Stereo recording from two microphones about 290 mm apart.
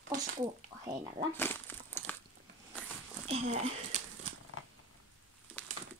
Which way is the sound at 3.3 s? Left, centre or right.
Right.